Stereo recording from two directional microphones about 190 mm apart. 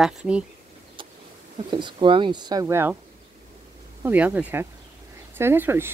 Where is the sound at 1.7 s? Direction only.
25° right (ahead or behind).